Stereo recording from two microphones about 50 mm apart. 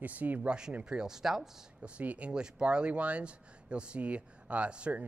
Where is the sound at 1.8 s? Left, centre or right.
Right.